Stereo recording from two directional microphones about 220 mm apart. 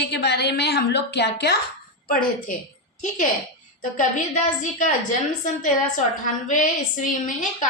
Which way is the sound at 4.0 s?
35° left (ahead or behind).